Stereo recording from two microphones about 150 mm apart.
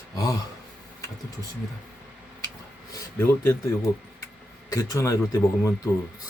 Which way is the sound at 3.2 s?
15° left (ahead or behind).